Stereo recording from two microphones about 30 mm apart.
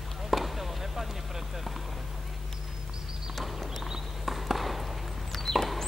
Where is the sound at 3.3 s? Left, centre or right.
Centre.